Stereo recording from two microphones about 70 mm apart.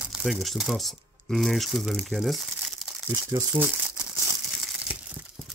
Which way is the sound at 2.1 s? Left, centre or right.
Centre.